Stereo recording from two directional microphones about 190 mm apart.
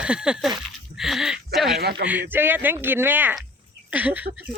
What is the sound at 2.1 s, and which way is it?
A man's voice, 10° right (ahead or behind).